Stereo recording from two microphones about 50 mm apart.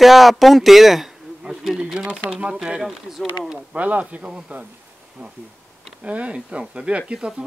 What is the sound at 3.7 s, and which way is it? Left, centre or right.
Speech, right.